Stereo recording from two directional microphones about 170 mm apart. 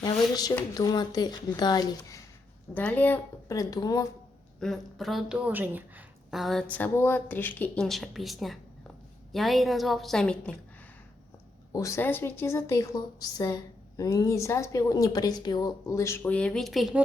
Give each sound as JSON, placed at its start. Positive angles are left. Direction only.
{"t": 0.0, "sound": "speech", "side_deg": 25}
{"t": 2.7, "sound": "speech", "side_deg": 10}
{"t": 4.6, "sound": "a woman's voice", "side_deg": 0}
{"t": 11.7, "sound": "a woman's voice", "side_deg": 20}